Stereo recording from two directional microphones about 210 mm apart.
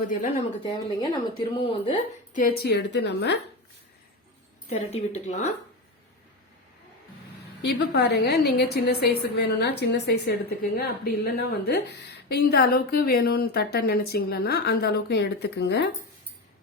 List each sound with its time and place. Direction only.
0.1 s speech: 35° left (ahead or behind)
1.4 s a woman's voice: 25° left (ahead or behind)
2.3 s a woman's voice: 45° left (ahead or behind)
4.7 s speech: 30° left (ahead or behind)
7.6 s a woman's voice: 55° left (ahead or behind)